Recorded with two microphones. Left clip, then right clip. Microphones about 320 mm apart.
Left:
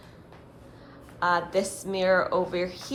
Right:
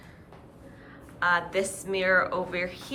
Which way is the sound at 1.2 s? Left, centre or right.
Centre.